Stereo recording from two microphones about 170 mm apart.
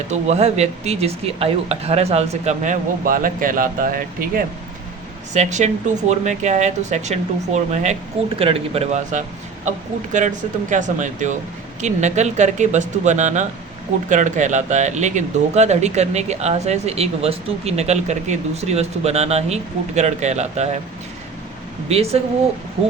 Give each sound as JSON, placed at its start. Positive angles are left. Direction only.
{"t": 0.1, "sound": "speech", "side_deg": -40}
{"t": 3.0, "sound": "speech", "side_deg": -55}
{"t": 5.3, "sound": "speech", "side_deg": -45}
{"t": 21.8, "sound": "speech", "side_deg": -40}